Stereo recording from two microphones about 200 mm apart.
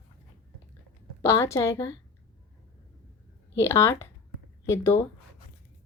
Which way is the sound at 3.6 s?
15° left (ahead or behind).